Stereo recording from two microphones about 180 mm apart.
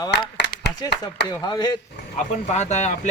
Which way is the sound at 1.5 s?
20° left (ahead or behind).